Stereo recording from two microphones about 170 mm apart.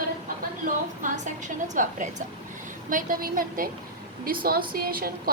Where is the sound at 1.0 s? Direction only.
45° right (ahead or behind); by 5.3 s 60° right (ahead or behind).